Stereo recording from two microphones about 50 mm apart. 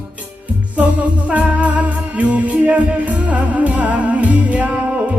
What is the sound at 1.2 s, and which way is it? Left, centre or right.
Music, right.